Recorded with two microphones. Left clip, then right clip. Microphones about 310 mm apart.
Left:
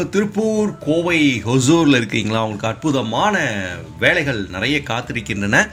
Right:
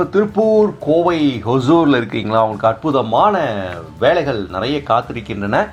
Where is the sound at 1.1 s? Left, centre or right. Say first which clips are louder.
Left 1 dB; left.